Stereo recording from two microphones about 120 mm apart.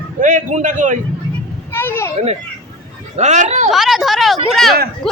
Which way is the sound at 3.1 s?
80° right.